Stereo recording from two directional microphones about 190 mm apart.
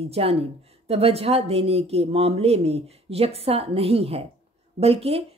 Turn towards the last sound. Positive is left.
turn(degrees=-30)  # may be behind; listen again after turning